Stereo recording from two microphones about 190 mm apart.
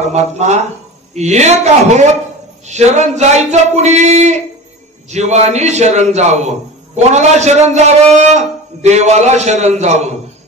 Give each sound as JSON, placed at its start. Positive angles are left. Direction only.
{"t": 0.0, "sound": "a man's voice", "side_deg": -35}